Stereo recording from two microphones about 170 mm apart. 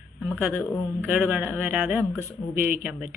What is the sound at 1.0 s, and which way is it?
Speech, 10° right (ahead or behind).